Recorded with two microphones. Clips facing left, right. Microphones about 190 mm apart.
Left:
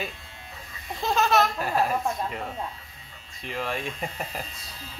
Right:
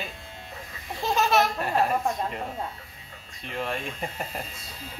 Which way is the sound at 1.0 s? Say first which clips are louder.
Even; 10° right (ahead or behind).